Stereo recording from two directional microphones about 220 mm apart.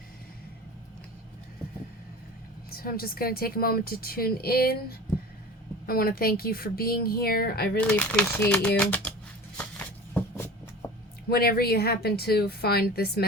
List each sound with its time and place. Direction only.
2.6 s speech: 45° left (ahead or behind)
5.8 s speech: 40° left (ahead or behind)
7.8 s speech: 5° left (ahead or behind)
9.6 s a sound: 10° left (ahead or behind)
11.3 s speech: 45° left (ahead or behind)